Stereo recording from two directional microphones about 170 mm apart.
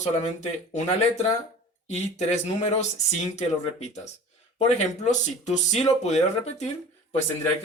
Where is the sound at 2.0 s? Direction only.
40° left (ahead or behind).